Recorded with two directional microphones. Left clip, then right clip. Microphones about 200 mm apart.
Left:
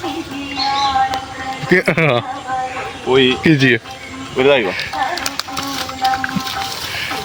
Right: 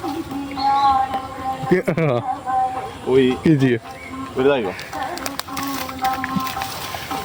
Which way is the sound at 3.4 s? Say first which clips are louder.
Left 5 dB; 5° right (ahead or behind).